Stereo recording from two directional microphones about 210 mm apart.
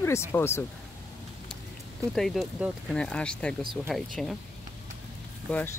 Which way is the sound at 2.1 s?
Centre (ahead or behind).